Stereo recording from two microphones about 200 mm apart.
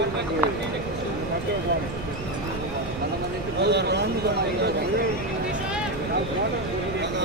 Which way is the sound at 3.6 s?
55° right (ahead or behind).